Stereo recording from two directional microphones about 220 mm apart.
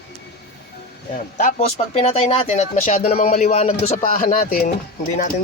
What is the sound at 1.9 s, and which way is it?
Speech, 30° left (ahead or behind).